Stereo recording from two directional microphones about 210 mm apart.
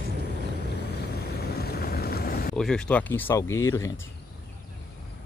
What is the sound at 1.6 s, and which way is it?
Boat, 50° left (ahead or behind).